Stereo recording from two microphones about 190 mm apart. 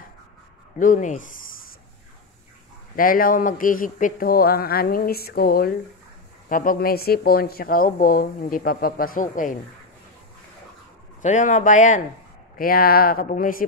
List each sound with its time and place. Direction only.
0.7 s speech: 40° left (ahead or behind)
3.0 s speech: 50° left (ahead or behind)
11.2 s speech: 40° left (ahead or behind)